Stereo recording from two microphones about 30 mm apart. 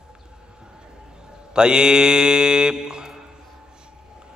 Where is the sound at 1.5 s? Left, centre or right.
Right.